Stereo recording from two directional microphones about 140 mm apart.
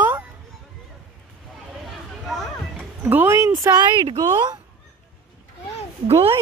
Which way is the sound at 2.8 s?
15° right (ahead or behind).